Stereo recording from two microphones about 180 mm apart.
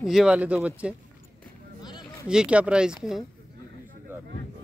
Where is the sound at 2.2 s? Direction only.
5° right (ahead or behind).